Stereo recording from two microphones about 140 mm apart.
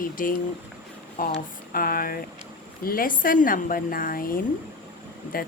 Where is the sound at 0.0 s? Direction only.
80° left.